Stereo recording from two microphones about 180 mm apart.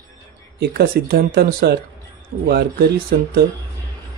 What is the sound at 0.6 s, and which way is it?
Speech, 60° right (ahead or behind).